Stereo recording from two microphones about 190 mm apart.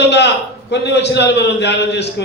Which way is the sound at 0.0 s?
65° left (ahead or behind).